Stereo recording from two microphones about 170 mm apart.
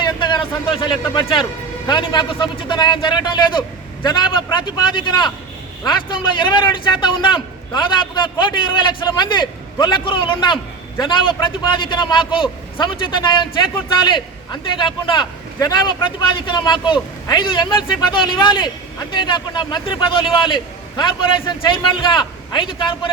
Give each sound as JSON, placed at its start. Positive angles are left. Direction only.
{"t": 0.0, "sound": "a man's voice", "side_deg": 25}